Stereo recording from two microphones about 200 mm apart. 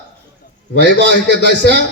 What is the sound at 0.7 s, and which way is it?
Speech, 60° left (ahead or behind).